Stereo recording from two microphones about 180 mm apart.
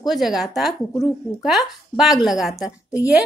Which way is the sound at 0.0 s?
Centre (ahead or behind).